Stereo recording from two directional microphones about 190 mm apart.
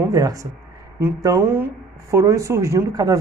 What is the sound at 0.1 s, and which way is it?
Speech, 15° right (ahead or behind).